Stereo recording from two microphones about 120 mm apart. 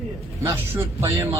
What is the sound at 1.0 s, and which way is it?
Speech, 25° right (ahead or behind).